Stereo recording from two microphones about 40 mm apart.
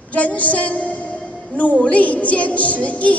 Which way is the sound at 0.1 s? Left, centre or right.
Left.